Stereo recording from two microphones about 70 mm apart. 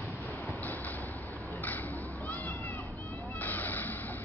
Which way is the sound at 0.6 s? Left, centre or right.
Left.